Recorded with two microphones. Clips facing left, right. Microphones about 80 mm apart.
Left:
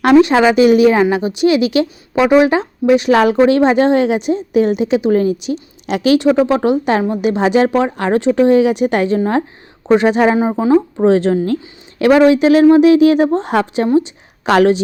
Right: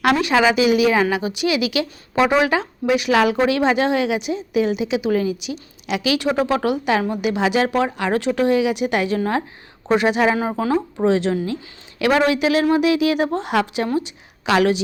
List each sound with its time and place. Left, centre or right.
0.0 s speech: left
0.5 s speech: left
6.4 s speech: left
11.0 s speech: left
12.0 s speech: left
14.4 s speech: left